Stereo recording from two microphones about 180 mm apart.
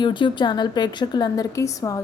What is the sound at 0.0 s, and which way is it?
A woman's voice, 25° left (ahead or behind).